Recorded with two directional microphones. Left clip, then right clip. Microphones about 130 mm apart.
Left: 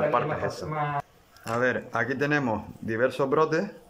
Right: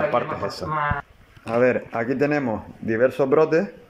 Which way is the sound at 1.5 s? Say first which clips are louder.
Right 6 dB; 10° right (ahead or behind).